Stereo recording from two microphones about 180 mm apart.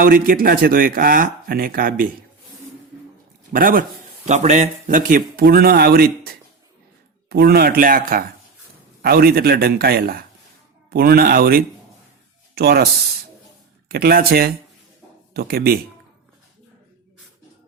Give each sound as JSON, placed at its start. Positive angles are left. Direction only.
{"t": 0.0, "sound": "speech", "side_deg": -55}
{"t": 3.5, "sound": "speech", "side_deg": -50}
{"t": 4.3, "sound": "a man's voice", "side_deg": -40}